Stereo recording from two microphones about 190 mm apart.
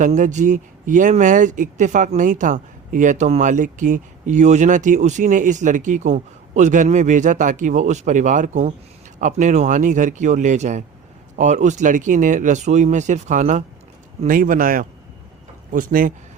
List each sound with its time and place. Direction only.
0.0 s speech: 40° right (ahead or behind)